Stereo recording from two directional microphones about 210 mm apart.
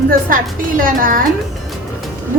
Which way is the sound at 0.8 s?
40° right (ahead or behind).